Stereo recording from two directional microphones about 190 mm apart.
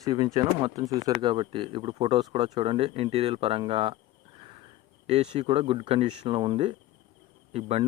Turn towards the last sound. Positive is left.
turn(degrees=-35)  # may be behind; listen again after turning